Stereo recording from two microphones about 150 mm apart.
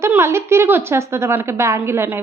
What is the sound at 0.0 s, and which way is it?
A woman's voice, 20° right (ahead or behind).